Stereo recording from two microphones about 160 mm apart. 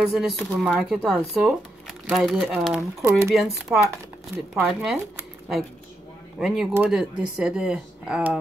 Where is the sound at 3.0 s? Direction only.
15° right (ahead or behind).